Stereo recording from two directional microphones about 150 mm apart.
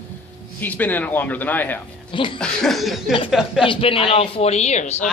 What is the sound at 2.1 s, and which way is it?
Speech, 35° left (ahead or behind).